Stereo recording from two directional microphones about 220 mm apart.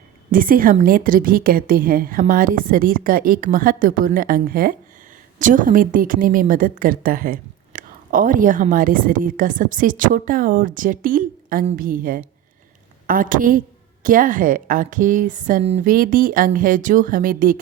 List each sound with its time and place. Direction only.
0.3 s a woman's voice: 40° right (ahead or behind)